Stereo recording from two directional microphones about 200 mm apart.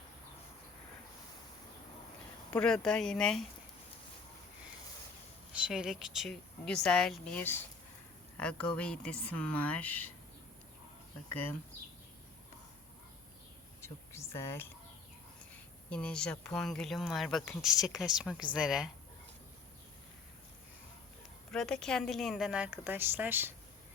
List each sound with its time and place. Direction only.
2.5 s a woman's voice: 5° left (ahead or behind)
5.6 s a woman's voice: 5° right (ahead or behind)
11.3 s speech: 10° left (ahead or behind)
13.8 s speech: 15° left (ahead or behind)
15.9 s a woman's voice: 5° left (ahead or behind)
21.5 s a woman's voice: 5° left (ahead or behind)